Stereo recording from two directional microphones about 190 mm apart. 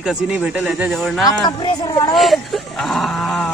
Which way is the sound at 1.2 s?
25° left (ahead or behind).